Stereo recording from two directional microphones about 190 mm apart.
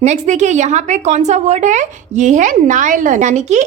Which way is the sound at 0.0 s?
40° right (ahead or behind).